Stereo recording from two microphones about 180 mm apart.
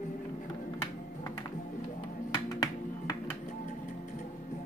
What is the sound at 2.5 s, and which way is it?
Music, 20° left (ahead or behind).